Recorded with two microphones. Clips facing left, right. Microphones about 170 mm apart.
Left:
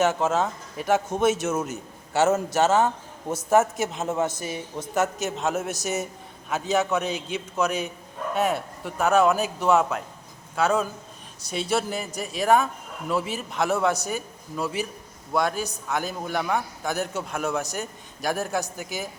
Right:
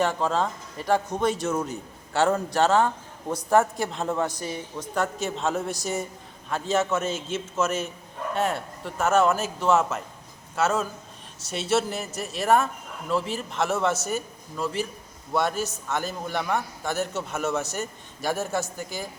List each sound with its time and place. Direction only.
0.3 s a man's voice: 5° left (ahead or behind)
2.8 s speech: 20° left (ahead or behind)
3.5 s a man's voice: 5° left (ahead or behind)